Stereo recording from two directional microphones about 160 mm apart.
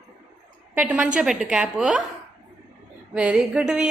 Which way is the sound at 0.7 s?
10° right (ahead or behind).